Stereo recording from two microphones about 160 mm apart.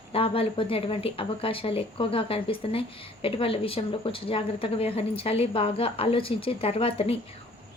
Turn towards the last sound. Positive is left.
turn(degrees=35)  # may be behind; listen again after turning